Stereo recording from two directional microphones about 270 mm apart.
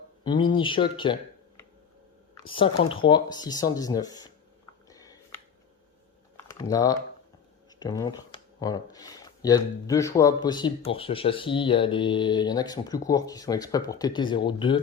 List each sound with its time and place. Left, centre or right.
0.3 s speech: centre
2.4 s speech: centre
4.9 s a sound: centre
6.3 s typing: centre
7.8 s speech: centre